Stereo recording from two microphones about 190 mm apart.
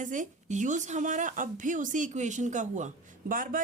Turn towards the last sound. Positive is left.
turn(degrees=-45)  # may be behind; listen again after turning